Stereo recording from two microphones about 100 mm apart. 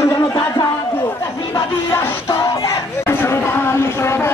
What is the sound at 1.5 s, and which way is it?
Music, 30° left (ahead or behind).